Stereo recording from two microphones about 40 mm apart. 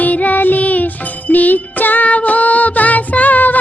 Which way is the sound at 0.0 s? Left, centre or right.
Left.